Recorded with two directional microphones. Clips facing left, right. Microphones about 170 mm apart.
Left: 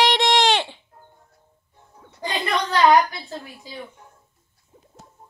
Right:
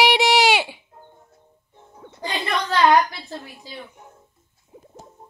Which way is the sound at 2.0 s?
20° right (ahead or behind).